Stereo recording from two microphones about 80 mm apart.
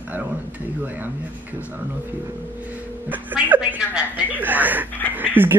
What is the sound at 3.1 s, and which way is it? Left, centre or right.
Music, right.